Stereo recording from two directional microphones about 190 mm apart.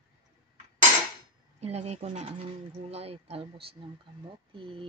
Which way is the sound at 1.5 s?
35° right (ahead or behind).